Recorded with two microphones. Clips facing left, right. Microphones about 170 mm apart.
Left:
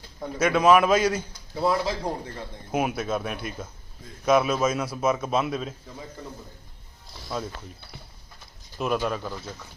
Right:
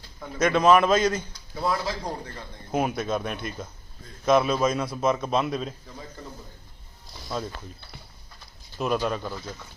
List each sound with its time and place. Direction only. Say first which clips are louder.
0.3 s a man's voice: even; 10° left (ahead or behind)
1.5 s speech: left 3 dB; 25° left (ahead or behind)
2.7 s a man's voice: even; 5° left (ahead or behind)
7.4 s a man's voice: even; 5° left (ahead or behind)
8.8 s a man's voice: even; centre (ahead or behind)